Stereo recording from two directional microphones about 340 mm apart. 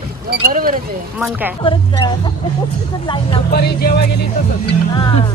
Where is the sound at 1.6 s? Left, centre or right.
Centre.